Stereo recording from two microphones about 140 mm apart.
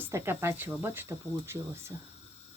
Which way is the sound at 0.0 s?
15° right (ahead or behind).